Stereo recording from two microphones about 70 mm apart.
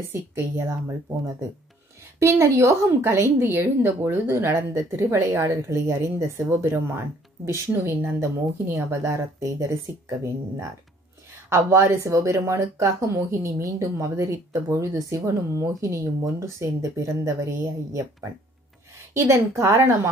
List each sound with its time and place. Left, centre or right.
0.1 s speech: right
2.1 s speech: right
3.4 s speech: right
9.9 s speech: right
11.4 s speech: right
19.1 s speech: right